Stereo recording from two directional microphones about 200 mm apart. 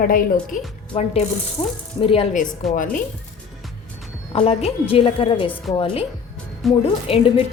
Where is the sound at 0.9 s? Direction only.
30° left (ahead or behind).